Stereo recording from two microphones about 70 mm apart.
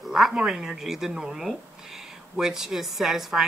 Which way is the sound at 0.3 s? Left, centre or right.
Centre.